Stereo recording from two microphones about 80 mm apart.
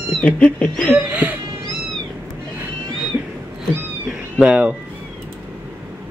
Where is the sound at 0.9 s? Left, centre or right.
Right.